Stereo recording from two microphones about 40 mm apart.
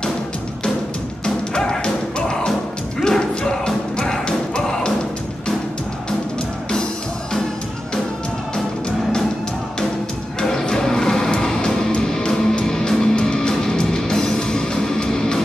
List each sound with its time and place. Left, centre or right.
1.2 s music: centre
10.4 s music: centre